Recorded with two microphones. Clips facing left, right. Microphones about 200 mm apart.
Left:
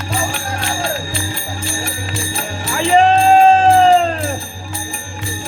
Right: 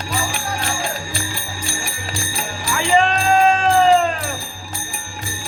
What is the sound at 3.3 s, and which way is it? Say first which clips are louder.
Music: left 4 dB; 30° left (ahead or behind).